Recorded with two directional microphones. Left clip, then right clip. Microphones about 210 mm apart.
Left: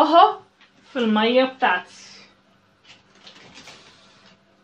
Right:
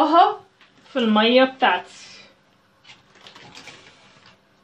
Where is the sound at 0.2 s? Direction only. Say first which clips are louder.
Left 1 dB; 30° left (ahead or behind).